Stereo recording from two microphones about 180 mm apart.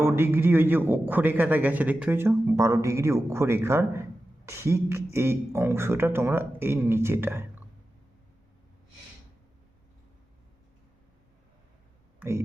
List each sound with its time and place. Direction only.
0.0 s a man's voice: 10° right (ahead or behind)